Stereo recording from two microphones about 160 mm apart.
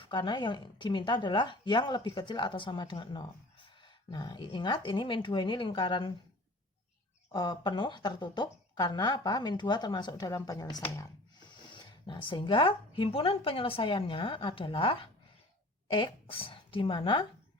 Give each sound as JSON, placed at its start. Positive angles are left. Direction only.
{"t": 0.0, "sound": "a woman's voice", "side_deg": 30}
{"t": 7.3, "sound": "a woman's voice", "side_deg": 25}
{"t": 10.8, "sound": "a sound", "side_deg": 20}
{"t": 11.7, "sound": "a woman's voice", "side_deg": 30}